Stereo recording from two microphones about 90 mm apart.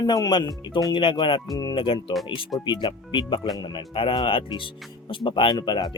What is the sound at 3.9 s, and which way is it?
Speech, 75° left (ahead or behind).